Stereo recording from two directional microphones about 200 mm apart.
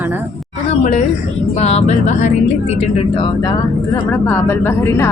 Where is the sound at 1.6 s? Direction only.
30° left (ahead or behind).